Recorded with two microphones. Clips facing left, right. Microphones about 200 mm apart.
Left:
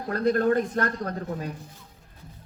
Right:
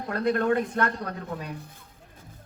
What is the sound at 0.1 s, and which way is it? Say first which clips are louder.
Speech: left 2 dB; 40° left (ahead or behind).